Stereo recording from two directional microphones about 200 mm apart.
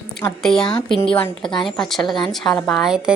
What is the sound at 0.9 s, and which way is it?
Speech, 25° left (ahead or behind).